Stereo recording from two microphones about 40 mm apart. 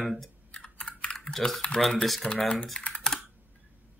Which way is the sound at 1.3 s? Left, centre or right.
Centre.